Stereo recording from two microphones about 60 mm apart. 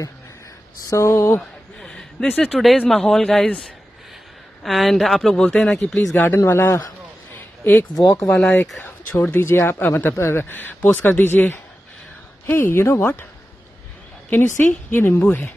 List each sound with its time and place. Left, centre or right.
0.8 s speech: left
1.4 s a sound: centre
2.4 s speech: centre
4.6 s speech: centre
6.1 s speech: left
7.3 s a sound: left
7.9 s speech: left
8.3 s speech: left
8.8 s speech: left
10.1 s speech: left
10.5 s speech: left
14.3 s speech: left